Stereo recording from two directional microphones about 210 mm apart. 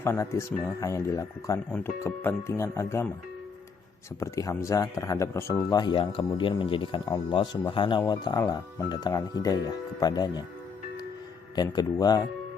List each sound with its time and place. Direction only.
0.0 s speech: 10° left (ahead or behind)
4.2 s speech: 15° left (ahead or behind)
11.5 s speech: 20° left (ahead or behind)